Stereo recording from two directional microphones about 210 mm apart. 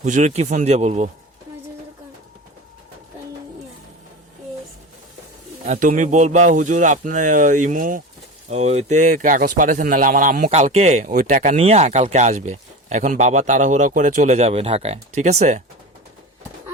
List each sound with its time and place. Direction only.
0.0 s speech: 35° right (ahead or behind)
5.6 s speech: 35° right (ahead or behind)